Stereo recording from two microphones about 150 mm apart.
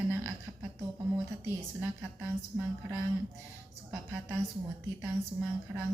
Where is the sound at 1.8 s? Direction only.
10° right (ahead or behind).